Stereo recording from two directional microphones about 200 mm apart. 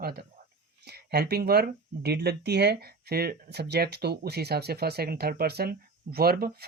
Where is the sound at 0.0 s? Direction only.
50° right (ahead or behind).